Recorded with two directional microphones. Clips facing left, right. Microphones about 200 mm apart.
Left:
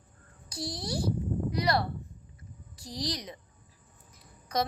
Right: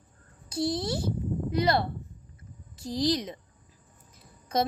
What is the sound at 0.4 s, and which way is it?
A child's voice, 25° right (ahead or behind).